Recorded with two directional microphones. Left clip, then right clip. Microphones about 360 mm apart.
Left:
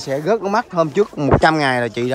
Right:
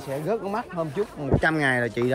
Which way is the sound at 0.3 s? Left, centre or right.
Centre.